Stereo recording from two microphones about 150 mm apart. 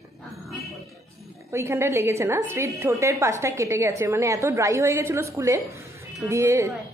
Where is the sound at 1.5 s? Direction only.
20° right (ahead or behind).